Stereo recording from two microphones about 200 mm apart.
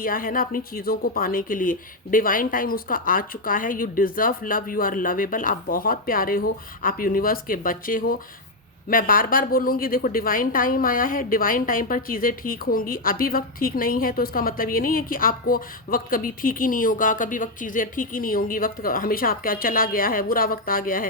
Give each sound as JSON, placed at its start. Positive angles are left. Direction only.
{"t": 0.0, "sound": "a woman's voice", "side_deg": 45}